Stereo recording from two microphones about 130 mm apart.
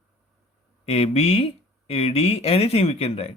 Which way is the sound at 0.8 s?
50° left (ahead or behind).